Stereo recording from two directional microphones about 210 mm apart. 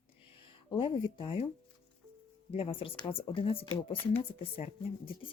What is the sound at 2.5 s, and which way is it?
Speech, 25° left (ahead or behind).